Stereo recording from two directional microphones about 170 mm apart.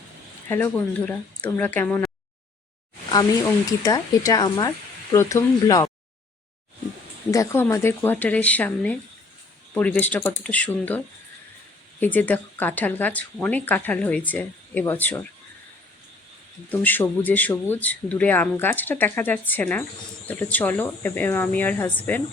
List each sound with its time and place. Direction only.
0.4 s speech: 10° left (ahead or behind)
3.7 s speech: 20° left (ahead or behind)
7.3 s speech: 15° left (ahead or behind)
16.8 s speech: 10° left (ahead or behind)